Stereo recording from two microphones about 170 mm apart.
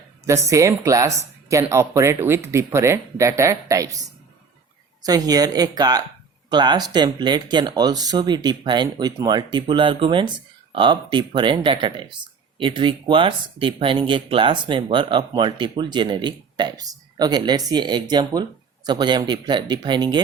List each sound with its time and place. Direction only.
0.3 s speech: 20° right (ahead or behind)
5.0 s speech: 20° right (ahead or behind)